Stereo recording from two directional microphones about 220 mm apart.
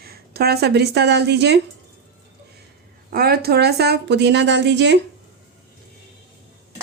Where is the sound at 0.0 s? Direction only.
45° right (ahead or behind).